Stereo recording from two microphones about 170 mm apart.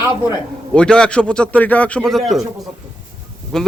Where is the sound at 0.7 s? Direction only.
5° left (ahead or behind).